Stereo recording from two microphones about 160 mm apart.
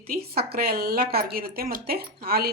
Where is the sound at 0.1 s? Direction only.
75° right (ahead or behind).